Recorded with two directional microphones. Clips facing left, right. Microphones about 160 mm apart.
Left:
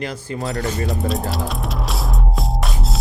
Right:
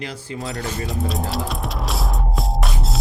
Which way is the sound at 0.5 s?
Centre (ahead or behind).